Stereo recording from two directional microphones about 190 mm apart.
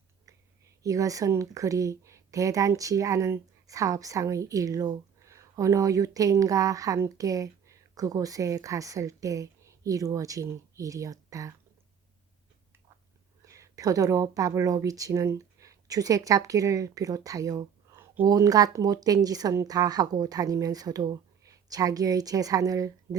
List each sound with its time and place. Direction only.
0.8 s speech: 15° right (ahead or behind)
13.4 s speech: 15° right (ahead or behind)